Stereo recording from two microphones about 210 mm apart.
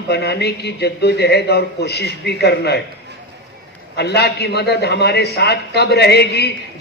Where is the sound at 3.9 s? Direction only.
50° left (ahead or behind).